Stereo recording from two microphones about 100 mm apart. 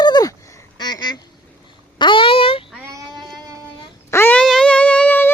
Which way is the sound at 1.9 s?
55° left (ahead or behind).